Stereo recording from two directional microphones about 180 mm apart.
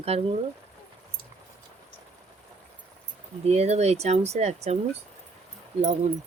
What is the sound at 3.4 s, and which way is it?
Speech, 35° right (ahead or behind).